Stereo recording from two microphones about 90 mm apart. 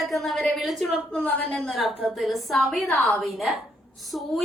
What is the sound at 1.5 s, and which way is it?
A woman's voice, centre (ahead or behind).